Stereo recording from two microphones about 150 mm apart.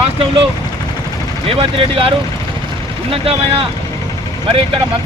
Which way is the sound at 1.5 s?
35° right (ahead or behind).